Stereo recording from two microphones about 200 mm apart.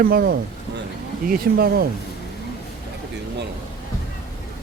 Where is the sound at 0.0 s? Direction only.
45° right (ahead or behind).